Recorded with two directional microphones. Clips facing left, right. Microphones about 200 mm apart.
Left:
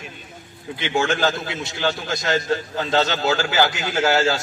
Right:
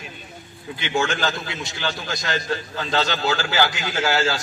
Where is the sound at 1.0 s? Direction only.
45° left (ahead or behind).